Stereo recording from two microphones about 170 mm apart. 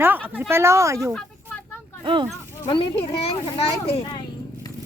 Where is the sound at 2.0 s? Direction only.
30° right (ahead or behind).